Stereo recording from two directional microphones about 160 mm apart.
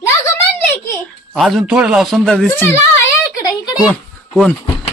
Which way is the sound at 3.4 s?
20° left (ahead or behind).